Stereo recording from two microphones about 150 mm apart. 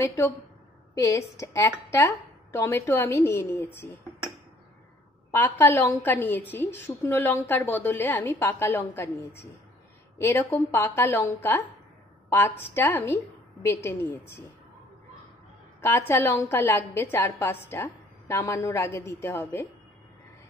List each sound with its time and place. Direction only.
0.0 s a woman's voice: 20° left (ahead or behind)
5.3 s a woman's voice: 15° left (ahead or behind)
15.8 s a woman's voice: 15° left (ahead or behind)